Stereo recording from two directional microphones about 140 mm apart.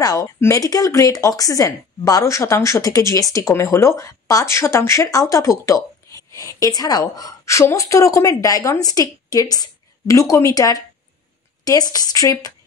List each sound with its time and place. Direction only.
0.0 s speech: 25° left (ahead or behind)